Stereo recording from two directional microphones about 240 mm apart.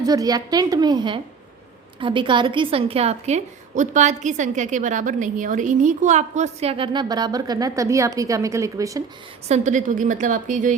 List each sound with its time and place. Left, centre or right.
0.0 s a woman's voice: centre
9.5 s a woman's voice: right